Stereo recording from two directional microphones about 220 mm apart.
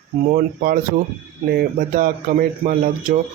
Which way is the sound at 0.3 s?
40° right (ahead or behind).